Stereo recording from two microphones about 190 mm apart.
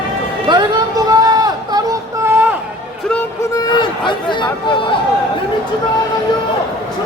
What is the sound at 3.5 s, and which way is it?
Chatter, 20° left (ahead or behind).